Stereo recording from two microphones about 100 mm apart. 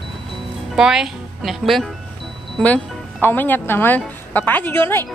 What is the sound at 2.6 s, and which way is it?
Speech, 15° left (ahead or behind).